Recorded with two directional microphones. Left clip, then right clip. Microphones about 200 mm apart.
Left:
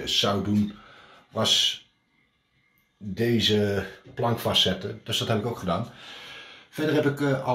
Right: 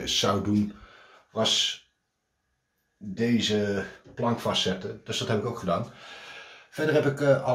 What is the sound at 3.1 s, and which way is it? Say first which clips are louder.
Speech: left 3 dB; 40° left (ahead or behind).